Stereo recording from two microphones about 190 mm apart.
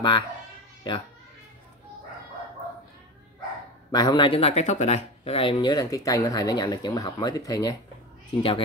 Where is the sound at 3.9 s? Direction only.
20° left (ahead or behind).